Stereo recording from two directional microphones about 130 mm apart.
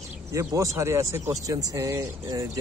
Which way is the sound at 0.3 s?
25° right (ahead or behind).